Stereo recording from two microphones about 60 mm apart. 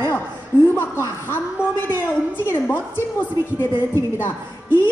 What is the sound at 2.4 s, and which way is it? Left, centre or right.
A woman's voice, left.